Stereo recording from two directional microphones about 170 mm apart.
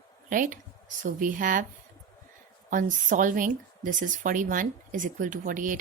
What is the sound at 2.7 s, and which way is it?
Speech, 50° right (ahead or behind).